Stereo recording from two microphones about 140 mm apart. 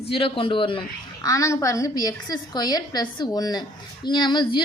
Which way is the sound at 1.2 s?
25° left (ahead or behind).